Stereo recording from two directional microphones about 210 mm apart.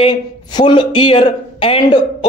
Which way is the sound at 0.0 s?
20° left (ahead or behind).